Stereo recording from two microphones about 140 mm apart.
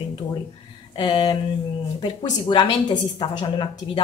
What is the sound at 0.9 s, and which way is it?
Speech, 35° left (ahead or behind).